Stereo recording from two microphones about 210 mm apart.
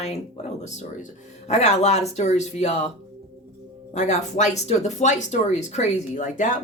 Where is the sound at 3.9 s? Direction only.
35° left (ahead or behind).